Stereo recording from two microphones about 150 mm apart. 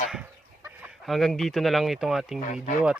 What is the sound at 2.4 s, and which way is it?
Speech, 60° left (ahead or behind).